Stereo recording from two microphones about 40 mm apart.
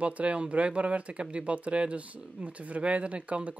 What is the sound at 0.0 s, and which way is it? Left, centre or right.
Speech, right.